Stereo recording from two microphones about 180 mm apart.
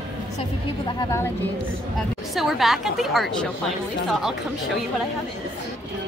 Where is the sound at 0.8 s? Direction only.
15° left (ahead or behind).